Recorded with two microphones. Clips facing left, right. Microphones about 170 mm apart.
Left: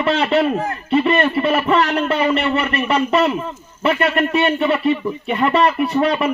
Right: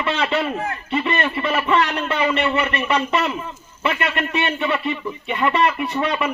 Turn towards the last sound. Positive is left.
turn(degrees=35)  # may be behind; listen again after turning